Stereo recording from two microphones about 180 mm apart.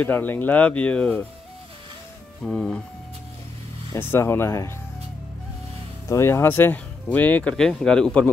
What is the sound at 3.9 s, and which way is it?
Speech, 15° left (ahead or behind).